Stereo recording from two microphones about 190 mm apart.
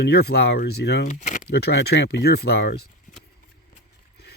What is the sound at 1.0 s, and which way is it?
Speech, 40° left (ahead or behind).